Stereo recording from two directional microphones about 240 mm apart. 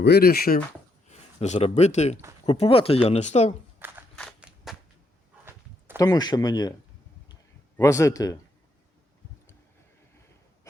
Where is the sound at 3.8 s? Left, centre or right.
Centre.